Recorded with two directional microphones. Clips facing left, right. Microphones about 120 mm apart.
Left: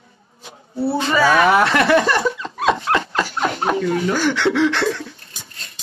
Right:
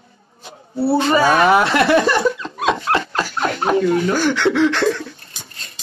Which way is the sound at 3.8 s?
45° right (ahead or behind).